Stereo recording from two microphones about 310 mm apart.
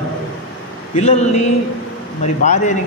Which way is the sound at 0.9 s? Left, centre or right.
Left.